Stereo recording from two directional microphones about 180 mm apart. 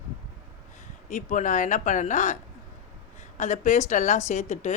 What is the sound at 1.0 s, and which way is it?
Speech, 45° left (ahead or behind).